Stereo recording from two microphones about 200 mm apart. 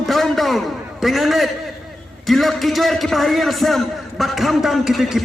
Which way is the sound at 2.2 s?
Centre (ahead or behind).